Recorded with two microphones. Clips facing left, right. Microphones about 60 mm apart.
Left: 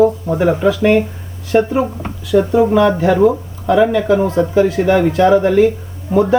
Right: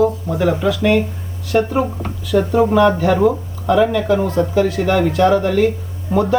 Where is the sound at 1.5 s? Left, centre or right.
Centre.